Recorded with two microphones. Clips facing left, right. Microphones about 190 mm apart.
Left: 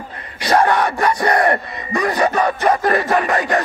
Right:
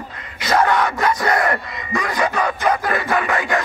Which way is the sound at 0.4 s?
35° left (ahead or behind).